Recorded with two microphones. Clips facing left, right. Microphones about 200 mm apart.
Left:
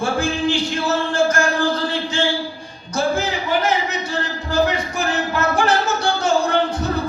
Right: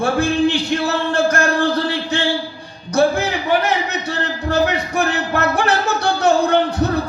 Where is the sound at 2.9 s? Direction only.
65° right (ahead or behind).